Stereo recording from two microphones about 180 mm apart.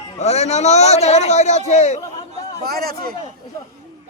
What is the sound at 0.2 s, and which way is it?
A man's voice, 35° left (ahead or behind).